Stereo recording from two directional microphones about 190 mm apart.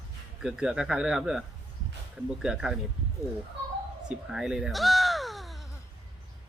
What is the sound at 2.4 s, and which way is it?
Speech, centre (ahead or behind).